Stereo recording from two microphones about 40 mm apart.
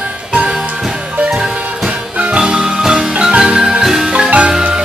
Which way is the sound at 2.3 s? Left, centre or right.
Right.